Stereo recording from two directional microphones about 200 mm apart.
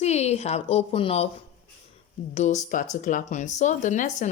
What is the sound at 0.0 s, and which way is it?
A woman's voice, 30° left (ahead or behind).